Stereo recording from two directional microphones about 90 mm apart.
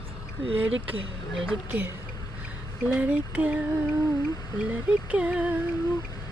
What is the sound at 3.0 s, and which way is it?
Speech, 15° right (ahead or behind).